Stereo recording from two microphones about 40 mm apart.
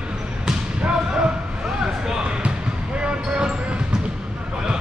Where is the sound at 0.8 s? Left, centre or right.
Right.